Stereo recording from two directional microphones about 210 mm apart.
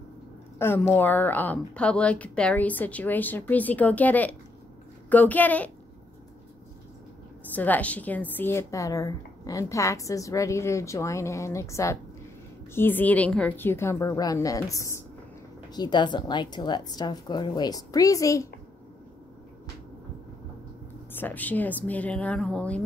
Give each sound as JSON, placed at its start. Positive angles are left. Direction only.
{"t": 0.6, "sound": "a woman's voice", "side_deg": 10}
{"t": 7.5, "sound": "a woman's voice", "side_deg": 10}
{"t": 21.1, "sound": "a woman's voice", "side_deg": 10}